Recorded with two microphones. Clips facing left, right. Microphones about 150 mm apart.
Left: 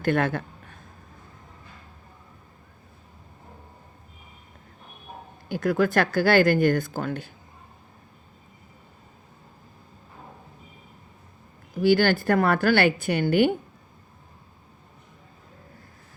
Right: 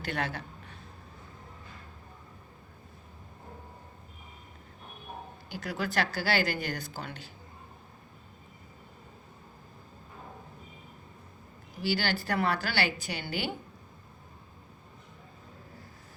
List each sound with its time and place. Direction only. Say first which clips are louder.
0.0 s a sound: left 10 dB; 50° left (ahead or behind)
5.5 s speech: left 12 dB; 50° left (ahead or behind)
11.8 s speech: left 11 dB; 50° left (ahead or behind)